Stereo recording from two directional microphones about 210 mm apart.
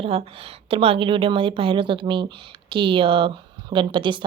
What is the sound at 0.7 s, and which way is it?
A woman's voice, 25° right (ahead or behind).